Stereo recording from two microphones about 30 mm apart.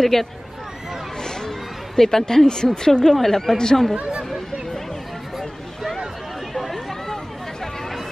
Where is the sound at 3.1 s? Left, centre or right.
Centre.